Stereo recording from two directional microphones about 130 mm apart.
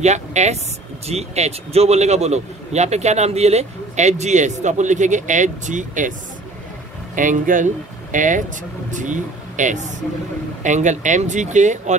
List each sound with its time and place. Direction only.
0.0 s a man's voice: 60° right (ahead or behind); by 6.1 s 75° right (ahead or behind)
7.2 s speech: 90° right; by 12.0 s 65° right (ahead or behind)